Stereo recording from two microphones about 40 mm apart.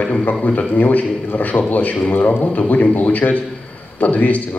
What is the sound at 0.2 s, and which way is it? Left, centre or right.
A man's voice, left.